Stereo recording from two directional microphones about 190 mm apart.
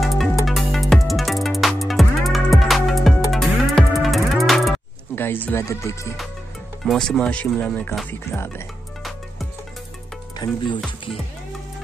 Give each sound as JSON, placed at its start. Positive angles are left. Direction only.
{"t": 0.0, "sound": "music", "side_deg": 0}
{"t": 5.1, "sound": "speech", "side_deg": 10}
{"t": 6.9, "sound": "speech", "side_deg": 5}
{"t": 8.1, "sound": "music", "side_deg": 15}
{"t": 10.4, "sound": "speech", "side_deg": 20}